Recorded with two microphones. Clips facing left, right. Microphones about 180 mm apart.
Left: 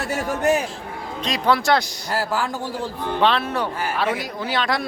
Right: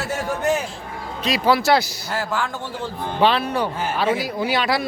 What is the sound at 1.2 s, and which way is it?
Speech, 5° right (ahead or behind).